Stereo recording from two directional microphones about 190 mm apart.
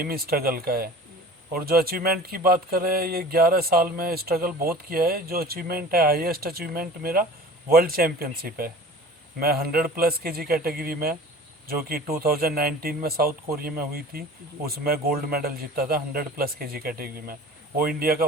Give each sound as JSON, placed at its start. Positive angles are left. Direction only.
{"t": 0.0, "sound": "speech", "side_deg": -50}